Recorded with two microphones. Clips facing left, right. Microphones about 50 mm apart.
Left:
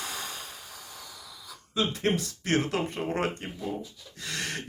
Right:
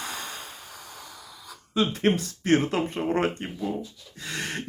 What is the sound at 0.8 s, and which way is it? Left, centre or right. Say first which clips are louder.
Vehicle: right 2 dB; right.